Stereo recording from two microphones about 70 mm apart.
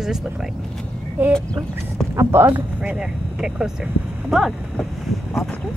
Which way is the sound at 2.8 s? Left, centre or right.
Centre.